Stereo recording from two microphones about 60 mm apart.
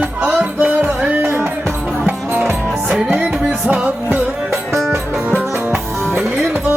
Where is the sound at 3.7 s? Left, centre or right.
Right.